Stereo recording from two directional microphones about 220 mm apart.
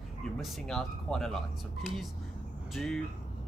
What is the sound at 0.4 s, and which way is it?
Speech, centre (ahead or behind).